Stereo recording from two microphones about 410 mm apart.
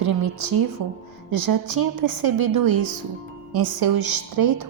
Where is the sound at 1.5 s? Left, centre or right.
Right.